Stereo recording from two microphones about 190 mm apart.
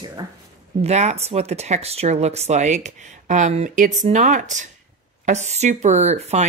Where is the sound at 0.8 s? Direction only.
35° right (ahead or behind).